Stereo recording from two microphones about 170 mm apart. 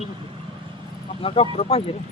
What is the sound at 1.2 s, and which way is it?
Speech, 35° left (ahead or behind).